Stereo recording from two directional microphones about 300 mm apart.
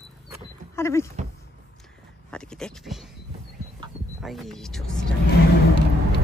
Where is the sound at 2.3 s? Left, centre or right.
Centre.